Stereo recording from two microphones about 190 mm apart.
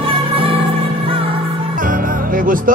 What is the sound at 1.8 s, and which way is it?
Music, 45° right (ahead or behind).